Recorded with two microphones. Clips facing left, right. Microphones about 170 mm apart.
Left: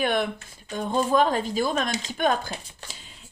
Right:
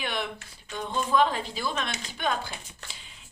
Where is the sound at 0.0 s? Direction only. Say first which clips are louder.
Left 8 dB; 50° left (ahead or behind).